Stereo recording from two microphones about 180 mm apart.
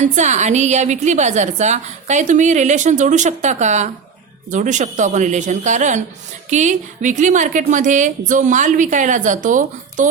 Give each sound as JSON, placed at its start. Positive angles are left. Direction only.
{"t": 0.0, "sound": "a woman's voice", "side_deg": -40}